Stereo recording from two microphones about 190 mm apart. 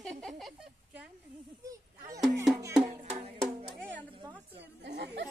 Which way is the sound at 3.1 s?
30° right (ahead or behind).